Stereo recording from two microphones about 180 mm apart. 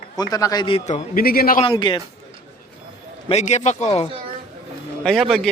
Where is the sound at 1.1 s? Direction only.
55° left (ahead or behind).